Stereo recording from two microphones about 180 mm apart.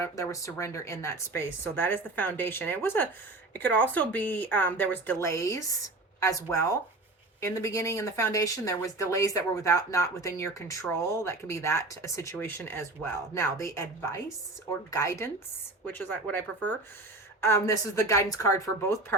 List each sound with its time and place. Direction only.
0.0 s speech: 15° left (ahead or behind)